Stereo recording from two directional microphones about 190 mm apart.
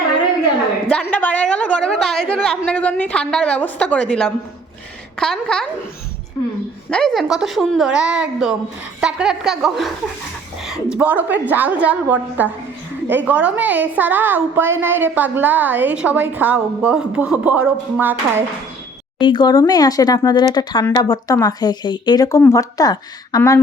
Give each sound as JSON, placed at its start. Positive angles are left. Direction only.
{"t": 0.9, "sound": "a woman's voice", "side_deg": 5}
{"t": 6.9, "sound": "a woman's voice", "side_deg": 0}
{"t": 19.2, "sound": "speech", "side_deg": 25}